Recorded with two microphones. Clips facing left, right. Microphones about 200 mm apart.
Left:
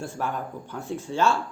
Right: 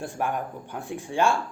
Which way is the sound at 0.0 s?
15° right (ahead or behind).